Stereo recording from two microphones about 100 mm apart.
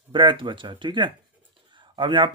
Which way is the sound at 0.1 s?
55° right (ahead or behind).